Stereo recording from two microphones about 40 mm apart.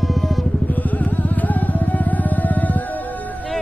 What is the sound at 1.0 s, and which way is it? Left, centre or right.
Music, left.